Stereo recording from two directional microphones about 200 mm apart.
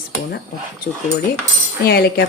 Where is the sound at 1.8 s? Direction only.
50° left (ahead or behind).